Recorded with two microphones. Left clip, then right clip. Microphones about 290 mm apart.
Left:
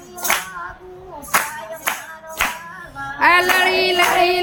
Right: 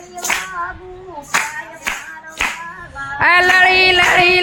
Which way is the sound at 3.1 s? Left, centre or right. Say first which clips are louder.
Right 3 dB; centre.